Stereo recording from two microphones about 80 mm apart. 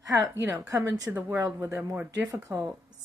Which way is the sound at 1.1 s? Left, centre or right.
Centre.